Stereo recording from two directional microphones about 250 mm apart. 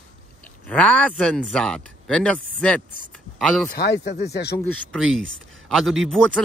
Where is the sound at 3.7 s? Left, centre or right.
Left.